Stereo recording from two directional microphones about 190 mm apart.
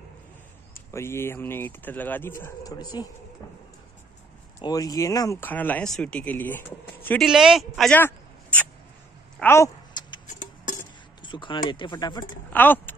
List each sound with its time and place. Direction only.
0.7 s speech: 15° left (ahead or behind)
4.6 s speech: 20° left (ahead or behind)
7.2 s a woman's voice: 5° right (ahead or behind)
9.4 s a sound: 15° left (ahead or behind)
10.2 s music: 45° left (ahead or behind)
11.2 s speech: 25° left (ahead or behind)
12.5 s speech: 10° left (ahead or behind)